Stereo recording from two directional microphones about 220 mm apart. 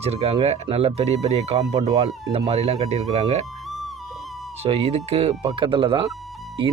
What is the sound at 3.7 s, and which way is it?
Music, centre (ahead or behind).